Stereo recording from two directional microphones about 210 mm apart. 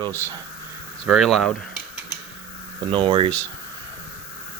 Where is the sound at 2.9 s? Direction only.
25° right (ahead or behind).